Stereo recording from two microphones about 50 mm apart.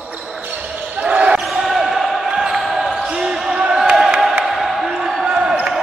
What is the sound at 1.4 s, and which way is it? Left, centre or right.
Basketball bounce, centre.